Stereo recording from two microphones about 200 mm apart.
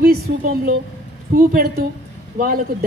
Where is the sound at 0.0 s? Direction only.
50° right (ahead or behind).